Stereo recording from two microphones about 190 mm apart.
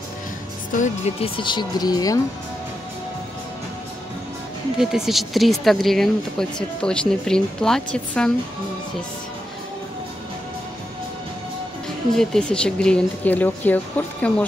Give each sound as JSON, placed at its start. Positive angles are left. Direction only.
{"t": 0.7, "sound": "speech", "side_deg": 35}
{"t": 4.7, "sound": "speech", "side_deg": 0}
{"t": 12.2, "sound": "speech", "side_deg": 5}